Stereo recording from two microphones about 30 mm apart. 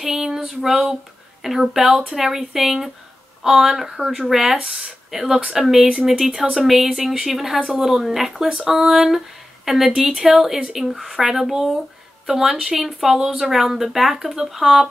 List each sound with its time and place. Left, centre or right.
0.0 s a sound: centre
1.4 s speech: centre
1.8 s speech: centre
13.4 s speech: centre